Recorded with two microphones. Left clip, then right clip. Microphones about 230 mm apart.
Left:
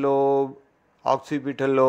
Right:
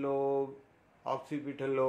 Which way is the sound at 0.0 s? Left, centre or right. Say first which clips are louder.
Left 11 dB; left.